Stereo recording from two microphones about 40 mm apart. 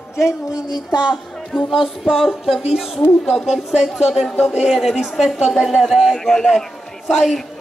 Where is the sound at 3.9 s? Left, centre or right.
Centre.